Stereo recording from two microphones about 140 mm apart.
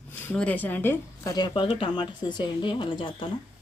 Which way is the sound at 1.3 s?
35° left (ahead or behind).